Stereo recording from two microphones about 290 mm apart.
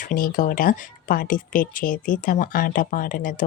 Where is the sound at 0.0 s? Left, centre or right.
Left.